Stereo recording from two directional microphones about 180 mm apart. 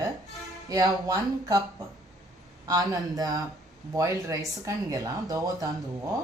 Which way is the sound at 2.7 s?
20° right (ahead or behind).